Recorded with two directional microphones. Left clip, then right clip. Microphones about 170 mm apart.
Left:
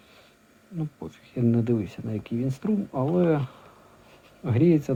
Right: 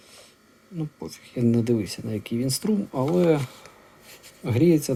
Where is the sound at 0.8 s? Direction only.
25° right (ahead or behind).